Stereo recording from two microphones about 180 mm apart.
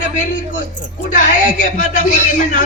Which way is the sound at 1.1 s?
45° left (ahead or behind).